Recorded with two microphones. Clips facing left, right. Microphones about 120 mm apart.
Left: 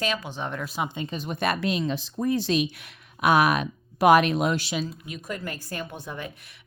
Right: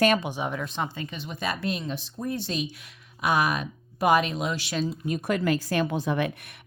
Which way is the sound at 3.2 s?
65° left (ahead or behind).